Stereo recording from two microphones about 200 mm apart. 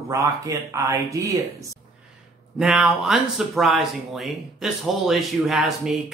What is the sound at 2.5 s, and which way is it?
Speech, 5° right (ahead or behind).